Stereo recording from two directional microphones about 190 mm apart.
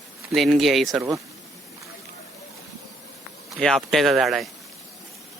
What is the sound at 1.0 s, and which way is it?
Speech, 15° right (ahead or behind).